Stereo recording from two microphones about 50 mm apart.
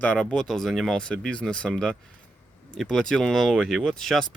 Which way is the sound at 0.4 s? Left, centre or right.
Centre.